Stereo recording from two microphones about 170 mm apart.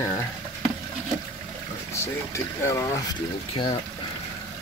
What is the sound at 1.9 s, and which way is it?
Speech, 15° left (ahead or behind).